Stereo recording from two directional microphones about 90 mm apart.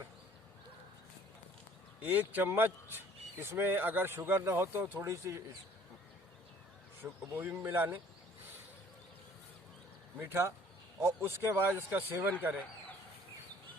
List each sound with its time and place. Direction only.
2.0 s speech: 20° right (ahead or behind)
7.0 s speech: 20° right (ahead or behind)
10.2 s speech: 25° right (ahead or behind)